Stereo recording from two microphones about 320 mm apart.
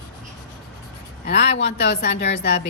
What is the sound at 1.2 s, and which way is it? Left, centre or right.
A woman's voice, left.